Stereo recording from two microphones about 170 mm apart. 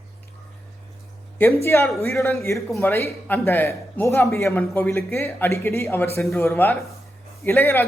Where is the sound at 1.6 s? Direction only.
15° left (ahead or behind).